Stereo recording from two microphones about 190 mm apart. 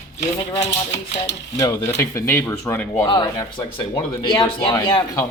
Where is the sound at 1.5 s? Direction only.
15° left (ahead or behind).